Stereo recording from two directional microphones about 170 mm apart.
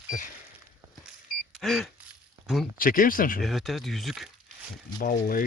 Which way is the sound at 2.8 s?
55° left (ahead or behind).